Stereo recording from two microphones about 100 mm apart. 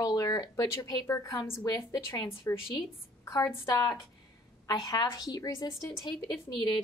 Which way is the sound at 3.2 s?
30° left (ahead or behind).